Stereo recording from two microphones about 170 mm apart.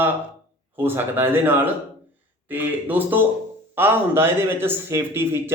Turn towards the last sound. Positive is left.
turn(degrees=-15)  # may be behind; listen again after turning